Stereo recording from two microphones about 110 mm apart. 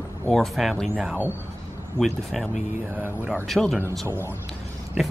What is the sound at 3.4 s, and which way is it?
Speech, centre (ahead or behind).